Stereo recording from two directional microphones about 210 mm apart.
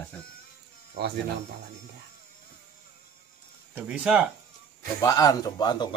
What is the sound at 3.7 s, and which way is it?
Speech, 5° right (ahead or behind).